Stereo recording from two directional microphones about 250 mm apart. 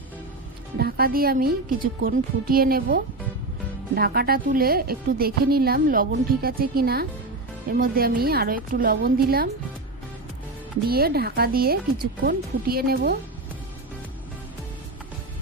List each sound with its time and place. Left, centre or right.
0.7 s a woman's voice: right
10.9 s a woman's voice: right